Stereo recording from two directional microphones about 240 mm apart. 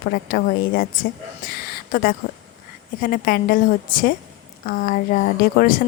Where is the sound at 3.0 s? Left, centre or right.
Left.